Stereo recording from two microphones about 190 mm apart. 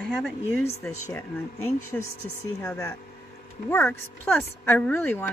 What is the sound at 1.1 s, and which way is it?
Speech, 10° left (ahead or behind).